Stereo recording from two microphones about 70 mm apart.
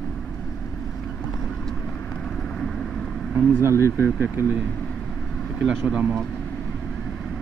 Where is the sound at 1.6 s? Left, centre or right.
Centre.